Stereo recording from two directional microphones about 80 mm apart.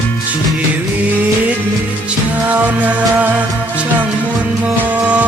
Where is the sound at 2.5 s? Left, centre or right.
Centre.